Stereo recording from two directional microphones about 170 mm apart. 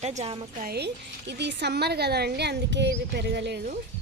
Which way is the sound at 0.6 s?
70° right (ahead or behind).